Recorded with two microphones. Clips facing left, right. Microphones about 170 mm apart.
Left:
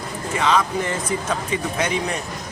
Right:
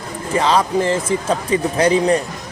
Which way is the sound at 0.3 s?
35° right (ahead or behind).